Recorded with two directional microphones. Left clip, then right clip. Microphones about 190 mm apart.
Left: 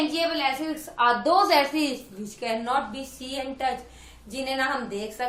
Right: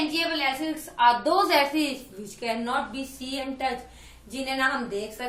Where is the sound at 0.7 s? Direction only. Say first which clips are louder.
Right 3 dB; 30° left (ahead or behind).